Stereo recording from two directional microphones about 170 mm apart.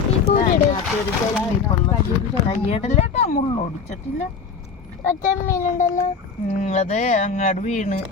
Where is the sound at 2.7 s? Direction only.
40° left (ahead or behind).